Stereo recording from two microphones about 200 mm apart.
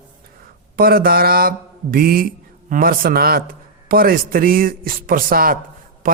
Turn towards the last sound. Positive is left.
turn(degrees=-45)  # may be behind; listen again after turning